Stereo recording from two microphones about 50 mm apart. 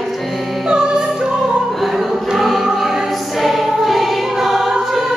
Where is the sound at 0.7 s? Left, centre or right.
Centre.